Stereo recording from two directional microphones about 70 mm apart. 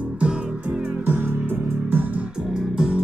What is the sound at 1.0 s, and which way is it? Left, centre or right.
Music, right.